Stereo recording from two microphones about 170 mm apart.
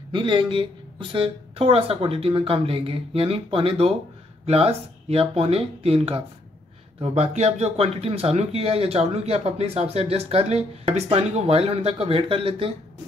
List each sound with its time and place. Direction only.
0.1 s speech: 25° right (ahead or behind)